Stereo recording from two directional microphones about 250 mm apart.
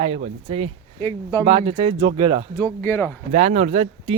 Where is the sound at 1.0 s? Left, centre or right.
Centre.